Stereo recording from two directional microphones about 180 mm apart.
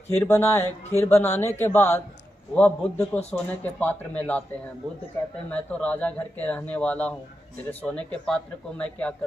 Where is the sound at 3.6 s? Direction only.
10° left (ahead or behind).